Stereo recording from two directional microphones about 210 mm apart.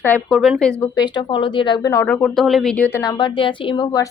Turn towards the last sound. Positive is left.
turn(degrees=20)  # may be behind; listen again after turning